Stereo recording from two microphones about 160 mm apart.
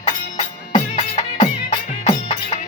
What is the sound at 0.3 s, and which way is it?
Music, 45° left (ahead or behind).